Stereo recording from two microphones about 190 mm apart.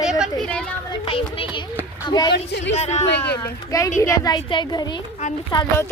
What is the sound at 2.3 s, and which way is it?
Speech, 60° left (ahead or behind).